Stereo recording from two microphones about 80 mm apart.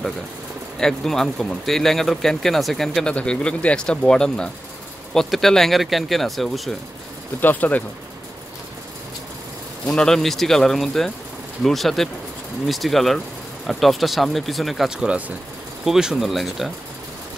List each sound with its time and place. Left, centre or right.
0.7 s speech: centre
7.3 s speech: left
9.8 s speech: centre
15.0 s speech: centre